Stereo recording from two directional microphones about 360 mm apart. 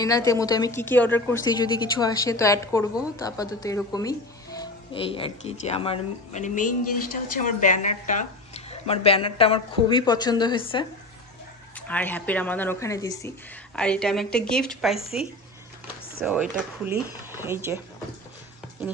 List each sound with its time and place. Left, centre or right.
0.0 s a woman's voice: centre
11.9 s speech: centre
16.3 s speech: centre